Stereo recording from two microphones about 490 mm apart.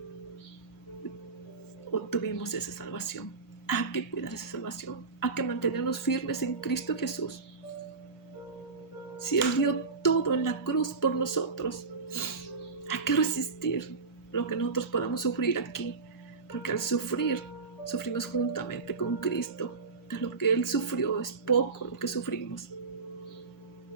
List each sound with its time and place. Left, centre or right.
1.9 s speech: left
9.2 s speech: left
12.0 s music: left
12.9 s a woman's voice: left